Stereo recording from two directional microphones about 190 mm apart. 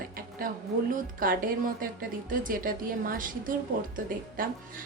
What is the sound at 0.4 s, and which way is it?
A woman's voice, 45° right (ahead or behind).